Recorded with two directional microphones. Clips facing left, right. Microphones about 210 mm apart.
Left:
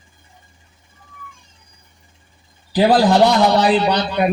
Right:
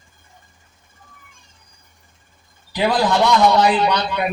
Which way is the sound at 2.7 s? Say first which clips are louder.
Left 5 dB; 35° left (ahead or behind).